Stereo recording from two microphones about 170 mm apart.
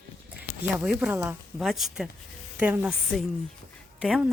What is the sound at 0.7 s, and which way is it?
Speech, 5° right (ahead or behind).